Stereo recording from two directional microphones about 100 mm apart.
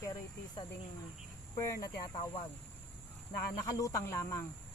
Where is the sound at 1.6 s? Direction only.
35° left (ahead or behind).